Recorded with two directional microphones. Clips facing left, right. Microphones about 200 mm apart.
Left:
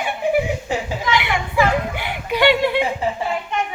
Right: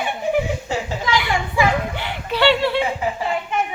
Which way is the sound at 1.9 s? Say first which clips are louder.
Left 1 dB; 10° left (ahead or behind).